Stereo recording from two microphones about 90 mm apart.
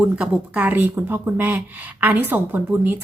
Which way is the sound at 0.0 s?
15° right (ahead or behind).